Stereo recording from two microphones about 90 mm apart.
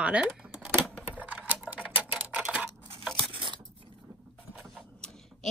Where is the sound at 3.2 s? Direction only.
75° right (ahead or behind).